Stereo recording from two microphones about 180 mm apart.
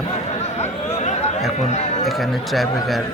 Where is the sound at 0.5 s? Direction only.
35° left (ahead or behind).